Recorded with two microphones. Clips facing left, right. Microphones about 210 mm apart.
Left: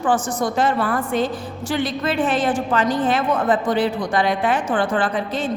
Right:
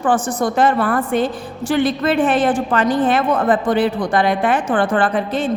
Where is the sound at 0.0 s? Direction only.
55° right (ahead or behind).